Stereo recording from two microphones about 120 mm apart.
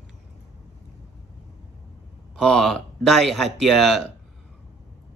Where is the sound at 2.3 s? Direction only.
5° left (ahead or behind).